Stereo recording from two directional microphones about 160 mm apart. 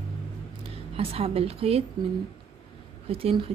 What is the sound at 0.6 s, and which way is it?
Speech, 35° right (ahead or behind).